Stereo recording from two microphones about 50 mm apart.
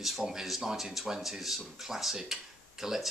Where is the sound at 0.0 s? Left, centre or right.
Centre.